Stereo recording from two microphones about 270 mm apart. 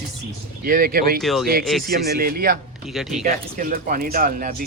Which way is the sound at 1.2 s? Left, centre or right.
Centre.